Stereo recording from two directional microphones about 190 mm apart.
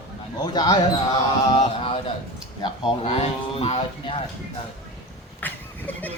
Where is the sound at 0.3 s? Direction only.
20° left (ahead or behind).